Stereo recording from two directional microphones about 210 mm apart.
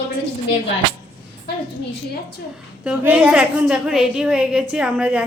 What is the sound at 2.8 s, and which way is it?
A woman's voice, 5° right (ahead or behind).